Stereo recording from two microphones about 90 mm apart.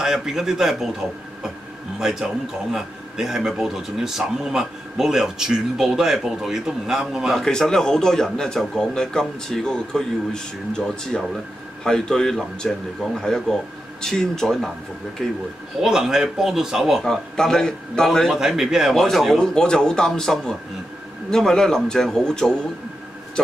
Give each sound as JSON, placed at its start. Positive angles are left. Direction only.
{"t": 0.0, "sound": "a man's voice", "side_deg": -5}
{"t": 2.0, "sound": "a man's voice", "side_deg": -5}